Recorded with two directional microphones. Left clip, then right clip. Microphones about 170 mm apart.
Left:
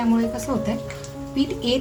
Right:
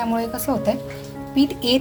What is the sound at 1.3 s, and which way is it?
Speech, 55° right (ahead or behind).